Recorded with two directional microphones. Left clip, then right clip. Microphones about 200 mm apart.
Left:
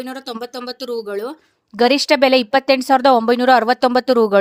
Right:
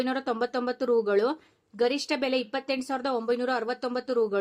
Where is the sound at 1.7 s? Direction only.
40° left (ahead or behind).